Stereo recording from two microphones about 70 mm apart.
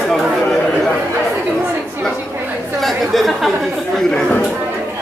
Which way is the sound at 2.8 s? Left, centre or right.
Centre.